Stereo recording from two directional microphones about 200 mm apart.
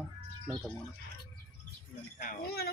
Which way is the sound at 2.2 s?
45° left (ahead or behind).